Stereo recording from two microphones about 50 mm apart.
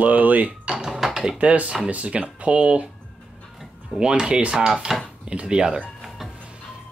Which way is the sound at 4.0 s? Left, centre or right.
Centre.